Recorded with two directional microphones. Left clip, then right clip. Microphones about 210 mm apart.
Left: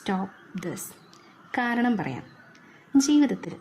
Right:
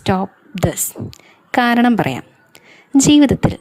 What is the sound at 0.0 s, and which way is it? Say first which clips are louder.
A woman's voice: right 12 dB; 35° right (ahead or behind).